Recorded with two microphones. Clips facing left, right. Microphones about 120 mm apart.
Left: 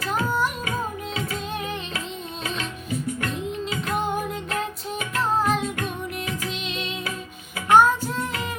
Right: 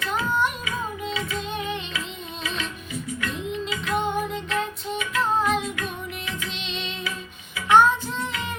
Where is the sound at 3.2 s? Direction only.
40° left (ahead or behind).